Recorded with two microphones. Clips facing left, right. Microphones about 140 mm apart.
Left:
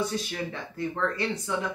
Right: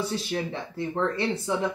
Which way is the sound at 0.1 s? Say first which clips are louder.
Right 3 dB; 30° right (ahead or behind).